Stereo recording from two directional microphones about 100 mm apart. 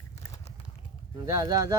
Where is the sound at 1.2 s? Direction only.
35° right (ahead or behind).